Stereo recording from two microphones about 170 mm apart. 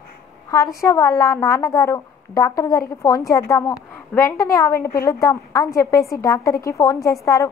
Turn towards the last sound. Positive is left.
turn(degrees=20)  # may be behind; listen again after turning